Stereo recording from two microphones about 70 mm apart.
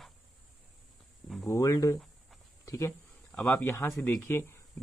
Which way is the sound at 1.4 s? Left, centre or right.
Left.